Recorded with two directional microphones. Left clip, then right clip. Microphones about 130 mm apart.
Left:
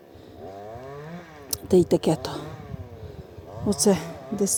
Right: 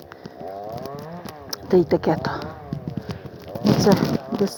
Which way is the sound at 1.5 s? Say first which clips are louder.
Right 2 dB; 85° left.